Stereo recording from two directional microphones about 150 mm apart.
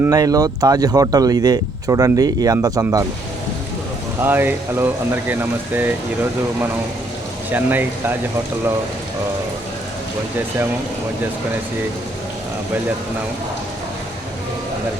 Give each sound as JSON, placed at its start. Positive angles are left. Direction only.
{"t": 0.0, "sound": "speech", "side_deg": -25}
{"t": 4.2, "sound": "speech", "side_deg": -15}
{"t": 7.5, "sound": "speech", "side_deg": -10}